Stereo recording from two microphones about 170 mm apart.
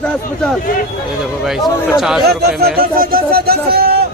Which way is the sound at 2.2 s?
65° right (ahead or behind).